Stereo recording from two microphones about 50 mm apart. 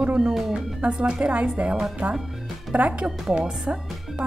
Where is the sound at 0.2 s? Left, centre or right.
Centre.